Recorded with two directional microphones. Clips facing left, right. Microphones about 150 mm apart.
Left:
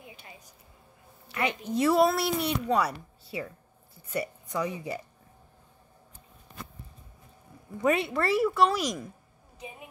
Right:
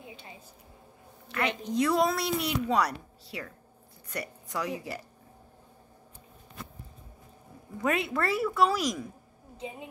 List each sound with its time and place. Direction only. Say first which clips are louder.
0.0 s a sound: right 2 dB; 25° right (ahead or behind)
1.3 s speech: even; 5° left (ahead or behind)
7.8 s speech: left 3 dB; centre (ahead or behind)